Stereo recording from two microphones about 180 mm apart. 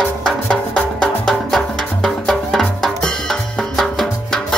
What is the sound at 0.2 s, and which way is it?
Music, 5° left (ahead or behind).